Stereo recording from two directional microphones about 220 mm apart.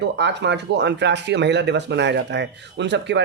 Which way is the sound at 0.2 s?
50° right (ahead or behind).